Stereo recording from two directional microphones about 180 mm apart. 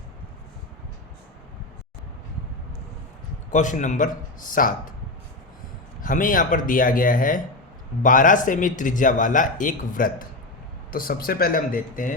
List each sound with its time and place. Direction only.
3.5 s speech: 45° left (ahead or behind)
6.0 s speech: 50° left (ahead or behind)